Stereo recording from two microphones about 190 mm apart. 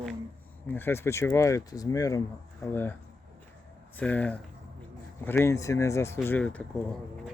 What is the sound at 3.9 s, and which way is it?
Speech, 10° left (ahead or behind).